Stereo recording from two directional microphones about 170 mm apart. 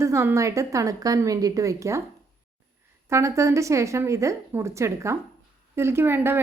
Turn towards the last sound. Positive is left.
turn(degrees=-15)  # may be behind; listen again after turning